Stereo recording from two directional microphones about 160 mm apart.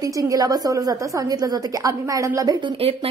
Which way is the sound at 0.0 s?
20° right (ahead or behind).